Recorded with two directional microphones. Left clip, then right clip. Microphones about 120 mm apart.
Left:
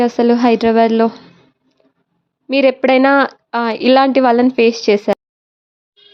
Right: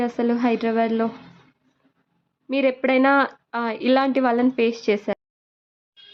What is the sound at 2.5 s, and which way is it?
Speech, 40° left (ahead or behind).